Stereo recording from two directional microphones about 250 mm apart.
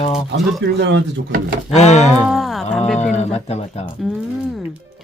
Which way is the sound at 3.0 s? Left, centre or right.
Left.